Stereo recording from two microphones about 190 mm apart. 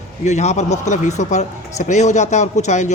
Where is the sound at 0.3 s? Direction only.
35° left (ahead or behind).